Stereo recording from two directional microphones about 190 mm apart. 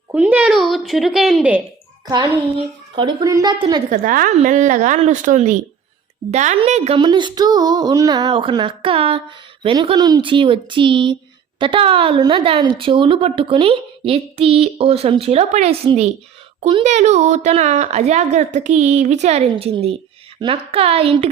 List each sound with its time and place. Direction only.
0.1 s a woman's voice: 10° right (ahead or behind)
2.0 s speech: 20° right (ahead or behind)
3.8 s a woman's voice: 45° right (ahead or behind)